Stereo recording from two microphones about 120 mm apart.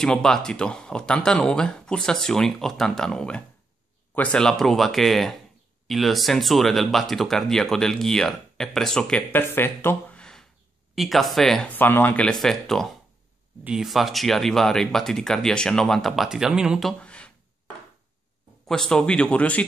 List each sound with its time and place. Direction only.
0.0 s speech: 5° left (ahead or behind)
9.4 s speech: 20° left (ahead or behind)
11.0 s speech: centre (ahead or behind)
11.7 s speech: 15° left (ahead or behind); by 16.9 s 5° right (ahead or behind)
17.0 s a sound: 10° left (ahead or behind)
18.7 s speech: 5° left (ahead or behind)